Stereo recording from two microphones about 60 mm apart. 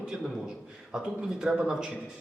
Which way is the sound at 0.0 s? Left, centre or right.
Centre.